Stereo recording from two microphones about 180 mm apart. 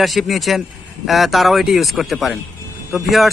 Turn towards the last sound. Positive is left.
turn(degrees=0)  # may be behind; listen again after turning